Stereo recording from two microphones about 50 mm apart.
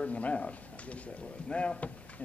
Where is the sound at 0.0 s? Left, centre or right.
Left.